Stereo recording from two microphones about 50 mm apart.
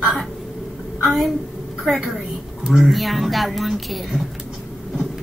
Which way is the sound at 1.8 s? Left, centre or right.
Centre.